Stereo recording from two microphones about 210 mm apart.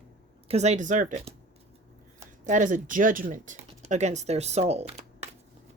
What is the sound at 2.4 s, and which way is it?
Speech, 35° right (ahead or behind).